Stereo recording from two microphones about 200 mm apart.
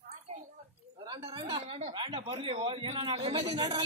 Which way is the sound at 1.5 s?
25° right (ahead or behind).